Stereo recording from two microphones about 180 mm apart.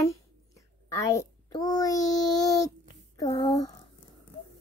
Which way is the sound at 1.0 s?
20° left (ahead or behind).